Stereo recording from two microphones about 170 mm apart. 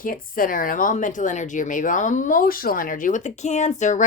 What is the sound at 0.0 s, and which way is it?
Speech, 55° left (ahead or behind).